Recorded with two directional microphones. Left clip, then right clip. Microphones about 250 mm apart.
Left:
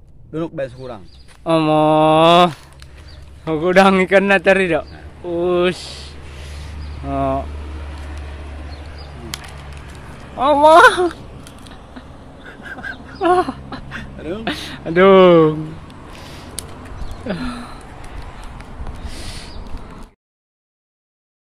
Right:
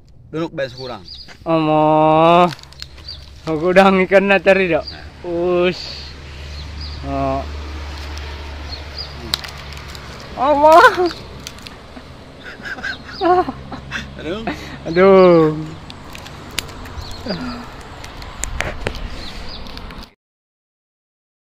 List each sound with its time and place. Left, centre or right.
0.3 s a man's voice: centre
7.1 s speech: centre
10.4 s speech: centre
12.4 s goose: centre
17.3 s speech: centre